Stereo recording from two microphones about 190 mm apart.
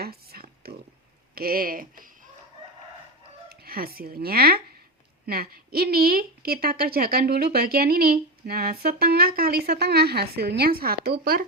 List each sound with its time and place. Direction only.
0.0 s a sound: 55° right (ahead or behind)
1.4 s a woman's voice: 50° right (ahead or behind)
3.5 s a woman's voice: 55° right (ahead or behind)